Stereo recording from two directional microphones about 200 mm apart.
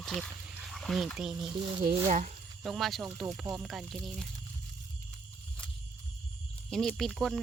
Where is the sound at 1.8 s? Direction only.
40° right (ahead or behind).